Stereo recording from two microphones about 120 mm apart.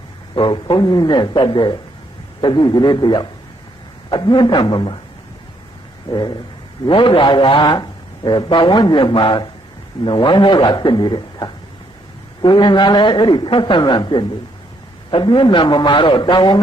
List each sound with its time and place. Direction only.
0.3 s a man's voice: 45° left (ahead or behind)
6.1 s a man's voice: 40° left (ahead or behind)